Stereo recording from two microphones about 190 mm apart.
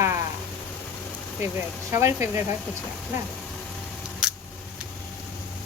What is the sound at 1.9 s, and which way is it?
Speech, 15° right (ahead or behind).